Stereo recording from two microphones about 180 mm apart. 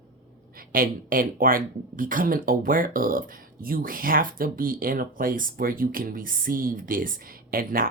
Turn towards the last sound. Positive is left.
turn(degrees=-55)  # may be behind; listen again after turning